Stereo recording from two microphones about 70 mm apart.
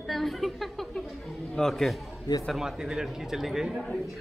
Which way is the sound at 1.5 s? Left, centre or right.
Centre.